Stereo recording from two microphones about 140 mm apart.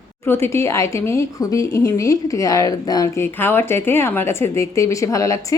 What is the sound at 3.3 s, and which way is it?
A woman's voice, 15° left (ahead or behind).